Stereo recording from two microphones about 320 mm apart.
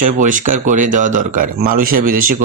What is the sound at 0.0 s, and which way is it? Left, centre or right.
Speech, right.